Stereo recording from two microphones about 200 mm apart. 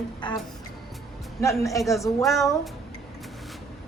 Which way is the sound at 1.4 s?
15° left (ahead or behind).